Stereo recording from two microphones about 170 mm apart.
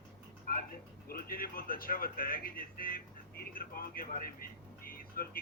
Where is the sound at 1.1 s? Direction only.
60° left (ahead or behind).